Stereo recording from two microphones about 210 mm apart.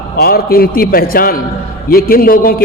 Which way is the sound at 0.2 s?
45° left (ahead or behind).